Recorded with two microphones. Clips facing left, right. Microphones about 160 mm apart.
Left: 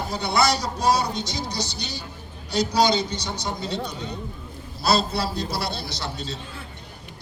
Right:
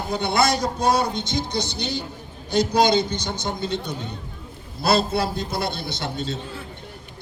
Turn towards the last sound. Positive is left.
turn(degrees=-55)  # may be behind; listen again after turning